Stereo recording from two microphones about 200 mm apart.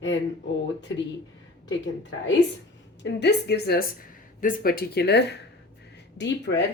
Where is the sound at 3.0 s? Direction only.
60° left (ahead or behind).